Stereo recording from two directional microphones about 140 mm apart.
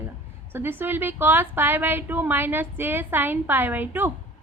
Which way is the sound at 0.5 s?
15° right (ahead or behind).